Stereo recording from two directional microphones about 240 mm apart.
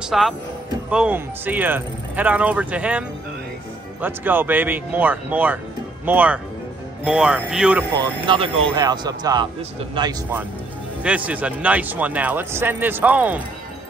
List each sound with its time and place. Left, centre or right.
0.0 s speech: centre
7.9 s speech: centre
11.0 s speech: centre